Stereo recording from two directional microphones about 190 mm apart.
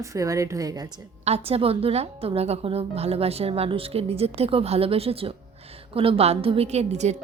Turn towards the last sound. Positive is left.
turn(degrees=-35)  # may be behind; listen again after turning